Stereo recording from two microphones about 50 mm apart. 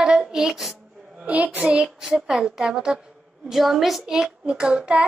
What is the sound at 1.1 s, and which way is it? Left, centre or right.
A woman's voice, right.